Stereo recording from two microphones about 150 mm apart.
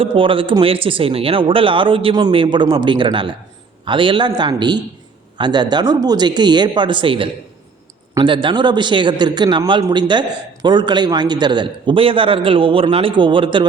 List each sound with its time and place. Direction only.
0.0 s a man's voice: 35° right (ahead or behind)